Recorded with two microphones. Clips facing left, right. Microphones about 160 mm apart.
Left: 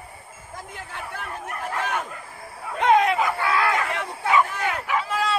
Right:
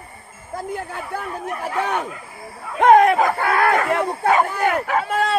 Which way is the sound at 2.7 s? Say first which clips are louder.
Right 6 dB; 50° right (ahead or behind).